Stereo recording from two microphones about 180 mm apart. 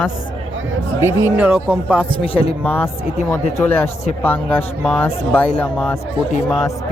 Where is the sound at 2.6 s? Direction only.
10° left (ahead or behind).